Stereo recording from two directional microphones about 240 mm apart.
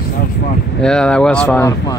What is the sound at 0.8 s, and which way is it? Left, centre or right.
Speech, centre.